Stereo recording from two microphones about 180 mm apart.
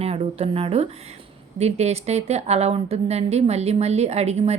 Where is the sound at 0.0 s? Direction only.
35° right (ahead or behind).